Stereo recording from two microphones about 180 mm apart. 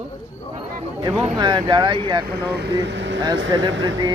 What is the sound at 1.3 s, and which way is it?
Speech, 25° right (ahead or behind).